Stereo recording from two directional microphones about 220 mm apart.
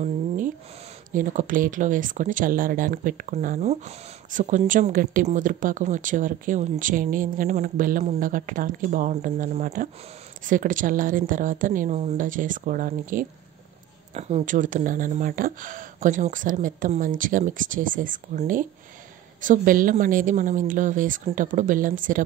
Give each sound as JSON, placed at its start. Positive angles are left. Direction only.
{"t": 1.1, "sound": "speech", "side_deg": -35}